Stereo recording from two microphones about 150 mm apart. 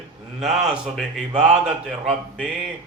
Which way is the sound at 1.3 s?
50° right (ahead or behind).